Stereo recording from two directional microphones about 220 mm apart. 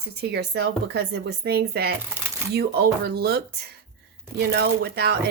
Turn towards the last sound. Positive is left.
turn(degrees=-45)  # may be behind; listen again after turning